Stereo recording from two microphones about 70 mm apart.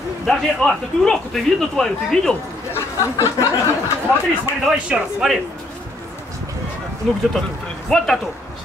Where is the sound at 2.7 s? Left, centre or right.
Left.